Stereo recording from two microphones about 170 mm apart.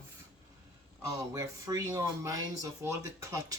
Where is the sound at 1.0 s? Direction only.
20° right (ahead or behind).